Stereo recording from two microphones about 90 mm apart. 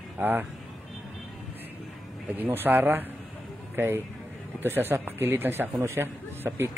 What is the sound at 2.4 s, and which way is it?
Speech, 20° right (ahead or behind).